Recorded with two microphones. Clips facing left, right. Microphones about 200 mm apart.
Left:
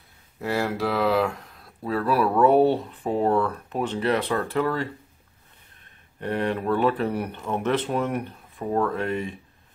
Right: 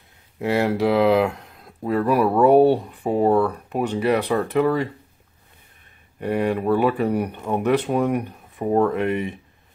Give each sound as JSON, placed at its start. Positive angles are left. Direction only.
{"t": 0.4, "sound": "speech", "side_deg": -20}
{"t": 6.1, "sound": "speech", "side_deg": -10}